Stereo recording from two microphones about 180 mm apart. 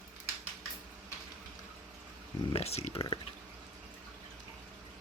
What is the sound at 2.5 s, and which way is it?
Speech, 35° left (ahead or behind).